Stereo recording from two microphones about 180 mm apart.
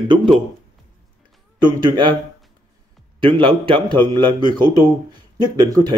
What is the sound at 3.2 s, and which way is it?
Speech, 30° right (ahead or behind).